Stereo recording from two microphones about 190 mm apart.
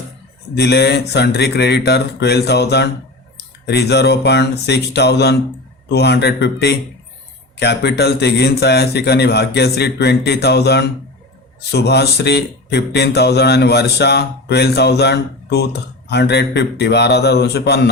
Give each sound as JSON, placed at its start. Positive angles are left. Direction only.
{"t": 0.5, "sound": "speech", "side_deg": 60}